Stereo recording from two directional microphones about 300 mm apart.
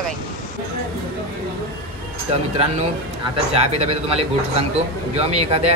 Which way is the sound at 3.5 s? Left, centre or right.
Right.